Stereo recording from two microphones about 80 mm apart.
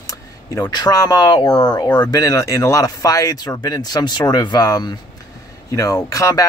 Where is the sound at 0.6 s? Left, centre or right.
Left.